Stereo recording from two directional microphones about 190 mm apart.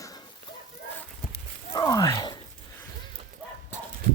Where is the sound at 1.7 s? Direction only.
20° left (ahead or behind).